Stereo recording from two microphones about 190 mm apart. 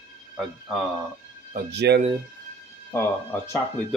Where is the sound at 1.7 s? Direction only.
65° right (ahead or behind).